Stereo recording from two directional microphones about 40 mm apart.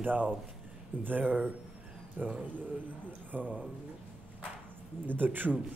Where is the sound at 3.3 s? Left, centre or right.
Right.